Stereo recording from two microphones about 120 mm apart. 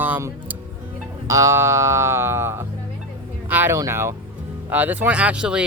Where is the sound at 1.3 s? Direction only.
25° right (ahead or behind).